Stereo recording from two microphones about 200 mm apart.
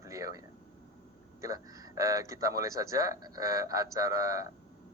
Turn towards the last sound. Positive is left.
turn(degrees=-15)  # may be behind; listen again after turning